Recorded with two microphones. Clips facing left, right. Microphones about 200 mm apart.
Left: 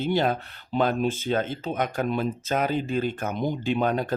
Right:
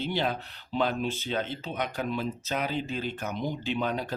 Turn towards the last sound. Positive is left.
turn(degrees=50)  # may be behind; listen again after turning